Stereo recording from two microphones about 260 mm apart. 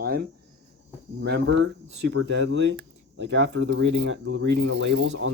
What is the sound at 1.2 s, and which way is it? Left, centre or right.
Speech, right.